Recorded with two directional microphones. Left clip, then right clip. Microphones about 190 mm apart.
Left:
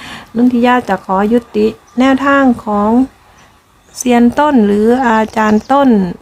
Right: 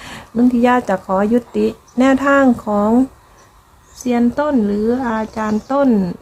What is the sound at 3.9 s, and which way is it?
Speech, 25° left (ahead or behind).